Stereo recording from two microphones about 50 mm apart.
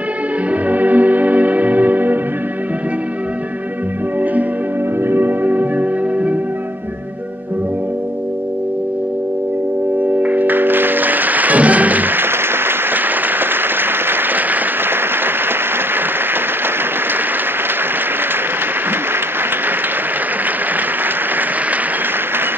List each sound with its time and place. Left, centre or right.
0.5 s music: right
5.0 s music: right
9.9 s music: right